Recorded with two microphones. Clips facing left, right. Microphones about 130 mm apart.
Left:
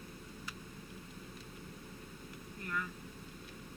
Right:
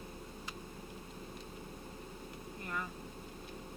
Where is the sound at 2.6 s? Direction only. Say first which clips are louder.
Left 1 dB; 30° right (ahead or behind).